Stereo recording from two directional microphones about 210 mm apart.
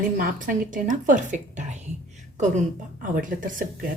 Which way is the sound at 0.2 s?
40° right (ahead or behind).